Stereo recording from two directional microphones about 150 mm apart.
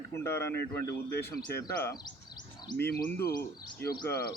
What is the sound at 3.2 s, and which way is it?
Speech, 90° left.